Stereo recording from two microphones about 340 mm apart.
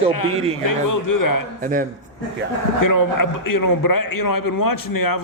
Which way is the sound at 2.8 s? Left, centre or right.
Left.